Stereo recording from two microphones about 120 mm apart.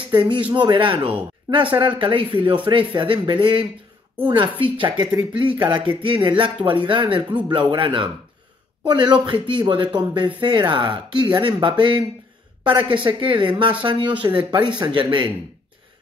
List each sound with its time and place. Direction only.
0.1 s speech: 40° right (ahead or behind)